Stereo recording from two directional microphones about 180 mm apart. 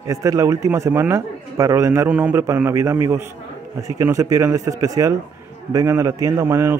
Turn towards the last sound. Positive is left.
turn(degrees=-15)  # may be behind; listen again after turning